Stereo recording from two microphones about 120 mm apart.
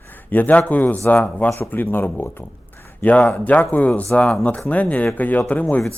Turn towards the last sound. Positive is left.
turn(degrees=15)  # may be behind; listen again after turning